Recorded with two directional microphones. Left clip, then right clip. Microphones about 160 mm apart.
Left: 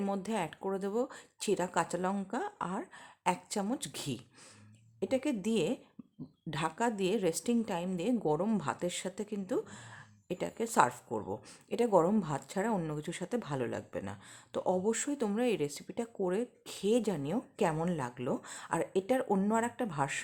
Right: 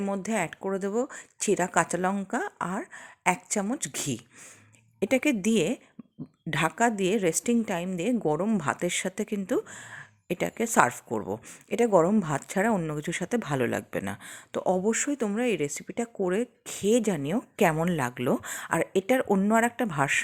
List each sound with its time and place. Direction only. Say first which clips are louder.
0.0 s a woman's voice: right 6 dB; 20° right (ahead or behind)
4.9 s a woman's voice: right 8 dB; 35° right (ahead or behind)
14.5 s a woman's voice: right 6 dB; 25° right (ahead or behind)